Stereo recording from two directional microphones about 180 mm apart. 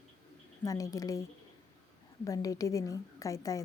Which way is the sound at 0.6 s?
20° left (ahead or behind).